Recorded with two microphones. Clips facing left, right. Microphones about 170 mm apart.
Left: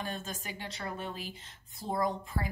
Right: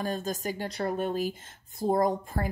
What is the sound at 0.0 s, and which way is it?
A woman's voice, 40° right (ahead or behind).